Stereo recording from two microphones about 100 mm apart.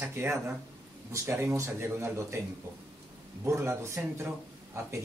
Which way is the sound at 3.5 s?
30° right (ahead or behind).